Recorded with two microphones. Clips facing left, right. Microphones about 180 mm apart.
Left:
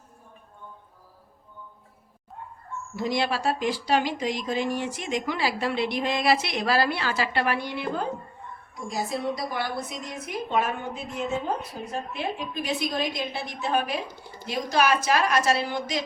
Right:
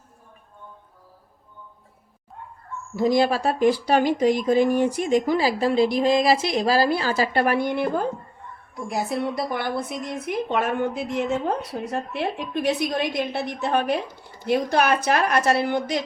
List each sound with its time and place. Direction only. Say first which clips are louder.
3.0 s a woman's voice: right 7 dB; 40° right (ahead or behind)
8.9 s a woman's voice: right 3 dB; 60° right (ahead or behind)